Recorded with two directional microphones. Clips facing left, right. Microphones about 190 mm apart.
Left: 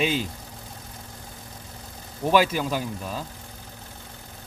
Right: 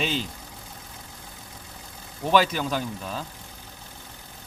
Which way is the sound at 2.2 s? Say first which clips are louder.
Left 1 dB; 10° left (ahead or behind).